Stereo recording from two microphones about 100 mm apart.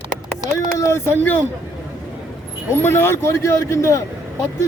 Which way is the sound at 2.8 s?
25° left (ahead or behind).